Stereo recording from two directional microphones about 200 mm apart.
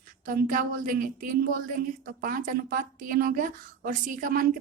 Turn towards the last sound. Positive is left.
turn(degrees=-40)  # may be behind; listen again after turning